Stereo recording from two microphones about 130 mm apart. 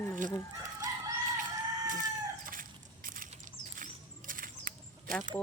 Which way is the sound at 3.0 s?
90° right.